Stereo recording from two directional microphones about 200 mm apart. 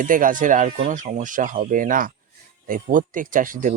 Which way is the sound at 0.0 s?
40° right (ahead or behind).